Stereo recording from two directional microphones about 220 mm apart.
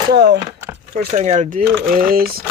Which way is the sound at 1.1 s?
35° right (ahead or behind).